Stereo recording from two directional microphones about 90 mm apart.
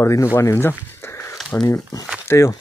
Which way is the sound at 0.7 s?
25° left (ahead or behind).